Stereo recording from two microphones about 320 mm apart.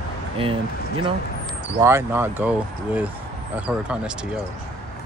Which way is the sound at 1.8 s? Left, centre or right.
Centre.